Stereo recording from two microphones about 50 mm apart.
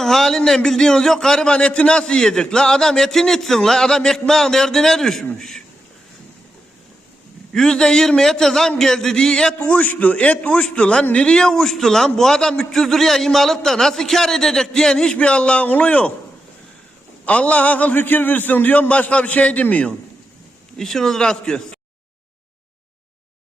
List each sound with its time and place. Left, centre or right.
0.0 s a man's voice: centre
7.5 s a man's voice: centre
9.6 s a man's voice: left; by 15.1 s centre
15.1 s a man's voice: left
17.2 s a man's voice: left
20.7 s a man's voice: centre